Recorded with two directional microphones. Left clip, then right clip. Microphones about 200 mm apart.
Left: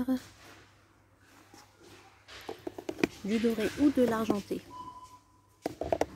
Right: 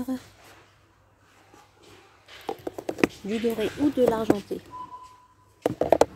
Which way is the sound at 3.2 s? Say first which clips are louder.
Right 4 dB; 10° left (ahead or behind).